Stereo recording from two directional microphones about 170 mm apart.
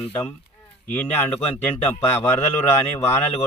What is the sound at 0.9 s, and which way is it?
A man's voice, 10° left (ahead or behind).